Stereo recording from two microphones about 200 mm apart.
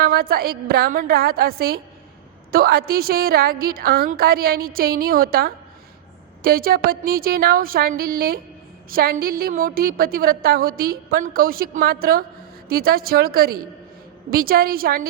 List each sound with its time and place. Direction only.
0.0 s a woman's voice: 50° right (ahead or behind)